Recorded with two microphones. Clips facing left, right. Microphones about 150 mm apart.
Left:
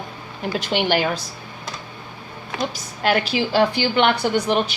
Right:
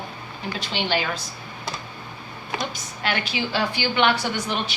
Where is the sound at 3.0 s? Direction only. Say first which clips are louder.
Left 7 dB; 40° left (ahead or behind).